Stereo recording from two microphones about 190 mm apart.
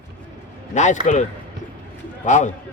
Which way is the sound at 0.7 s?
40° left (ahead or behind).